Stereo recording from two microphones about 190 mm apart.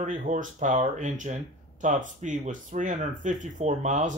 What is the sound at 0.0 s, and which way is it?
Speech, 45° right (ahead or behind).